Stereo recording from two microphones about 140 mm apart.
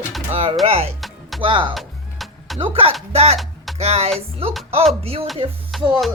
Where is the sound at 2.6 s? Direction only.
40° right (ahead or behind).